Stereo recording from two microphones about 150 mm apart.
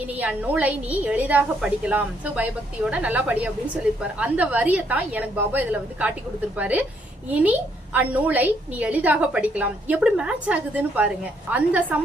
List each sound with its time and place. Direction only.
0.2 s a woman's voice: 10° right (ahead or behind)
7.9 s a woman's voice: 10° right (ahead or behind)